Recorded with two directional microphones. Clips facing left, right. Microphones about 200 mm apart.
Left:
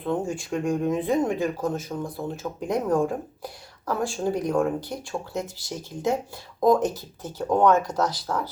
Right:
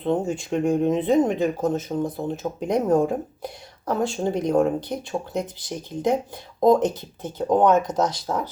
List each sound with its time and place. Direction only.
0.0 s speech: 20° right (ahead or behind)